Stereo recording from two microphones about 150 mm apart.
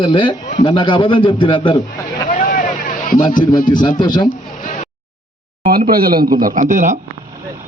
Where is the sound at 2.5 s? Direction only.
70° left (ahead or behind).